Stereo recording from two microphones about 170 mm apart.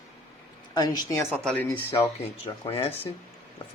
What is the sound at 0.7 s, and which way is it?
Speech, 25° left (ahead or behind).